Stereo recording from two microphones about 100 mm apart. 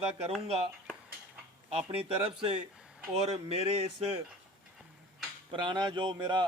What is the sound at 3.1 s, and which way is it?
Speech, 90° right.